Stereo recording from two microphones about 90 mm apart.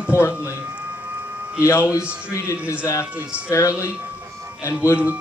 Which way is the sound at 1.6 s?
30° left (ahead or behind).